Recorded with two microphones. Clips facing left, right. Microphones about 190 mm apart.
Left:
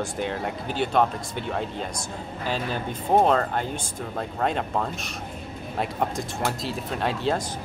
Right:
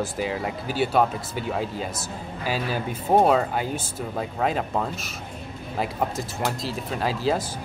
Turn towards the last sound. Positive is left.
turn(degrees=0)  # may be behind; listen again after turning